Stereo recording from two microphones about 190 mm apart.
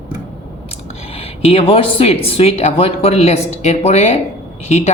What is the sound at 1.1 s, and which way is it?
Speech, 30° left (ahead or behind).